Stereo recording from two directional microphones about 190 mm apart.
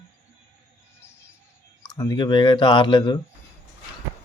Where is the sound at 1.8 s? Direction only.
20° left (ahead or behind).